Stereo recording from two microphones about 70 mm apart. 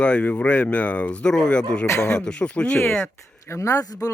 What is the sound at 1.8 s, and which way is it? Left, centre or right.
Speech, left.